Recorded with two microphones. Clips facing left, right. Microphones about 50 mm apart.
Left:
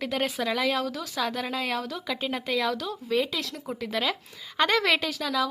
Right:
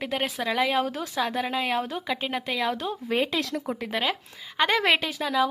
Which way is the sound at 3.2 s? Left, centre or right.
Right.